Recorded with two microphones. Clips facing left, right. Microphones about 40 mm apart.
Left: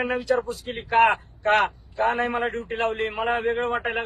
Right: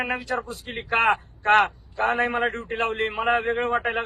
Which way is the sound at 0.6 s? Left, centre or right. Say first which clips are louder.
Left 1 dB; right.